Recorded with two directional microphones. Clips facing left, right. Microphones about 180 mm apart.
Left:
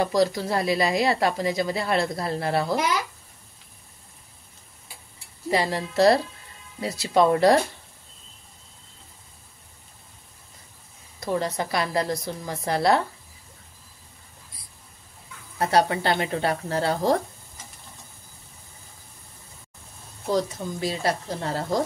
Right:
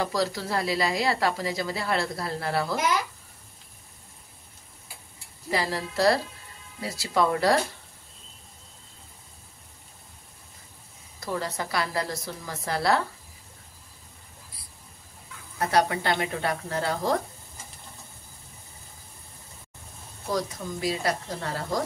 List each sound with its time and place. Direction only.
0.0 s speech: 20° left (ahead or behind)
5.5 s speech: 25° left (ahead or behind)
11.1 s speech: 20° left (ahead or behind)
15.7 s speech: 30° left (ahead or behind)
20.2 s speech: 25° left (ahead or behind)